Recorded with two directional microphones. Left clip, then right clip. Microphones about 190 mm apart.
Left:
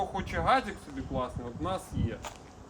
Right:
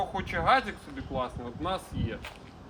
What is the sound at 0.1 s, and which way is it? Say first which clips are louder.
A man's voice: right 4 dB; 5° left (ahead or behind).